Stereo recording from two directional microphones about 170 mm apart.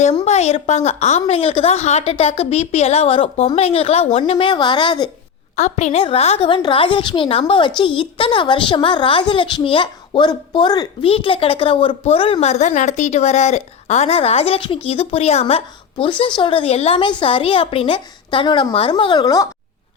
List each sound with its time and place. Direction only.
0.3 s a woman's voice: 40° left (ahead or behind)
5.5 s a woman's voice: 45° left (ahead or behind); by 19.5 s 20° left (ahead or behind)